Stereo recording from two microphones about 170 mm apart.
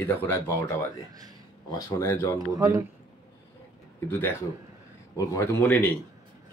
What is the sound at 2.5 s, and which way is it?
Speech, 20° right (ahead or behind).